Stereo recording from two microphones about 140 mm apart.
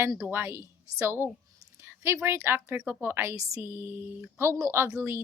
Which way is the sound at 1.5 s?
20° right (ahead or behind).